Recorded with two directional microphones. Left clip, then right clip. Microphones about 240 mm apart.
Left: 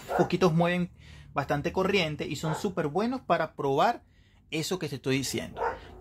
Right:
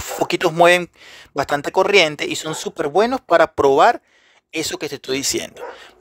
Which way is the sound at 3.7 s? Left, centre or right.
Right.